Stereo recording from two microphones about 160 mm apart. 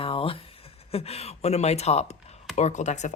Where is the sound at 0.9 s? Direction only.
40° left (ahead or behind).